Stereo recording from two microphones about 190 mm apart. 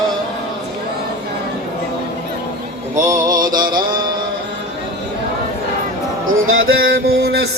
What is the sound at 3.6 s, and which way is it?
Mantra, 50° right (ahead or behind).